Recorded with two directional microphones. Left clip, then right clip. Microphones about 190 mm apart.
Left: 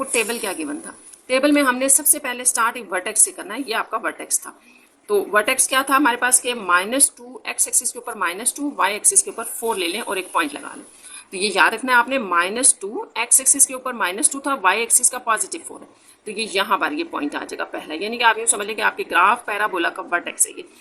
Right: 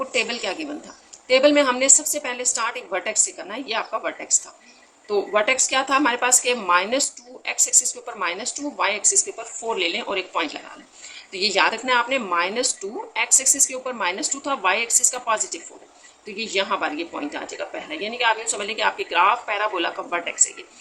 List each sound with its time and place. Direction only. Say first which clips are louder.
0.1 s a woman's voice: left 1 dB; 40° left (ahead or behind)